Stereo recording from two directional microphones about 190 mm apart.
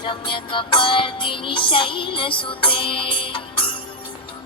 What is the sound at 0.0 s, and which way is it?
Music, 25° left (ahead or behind).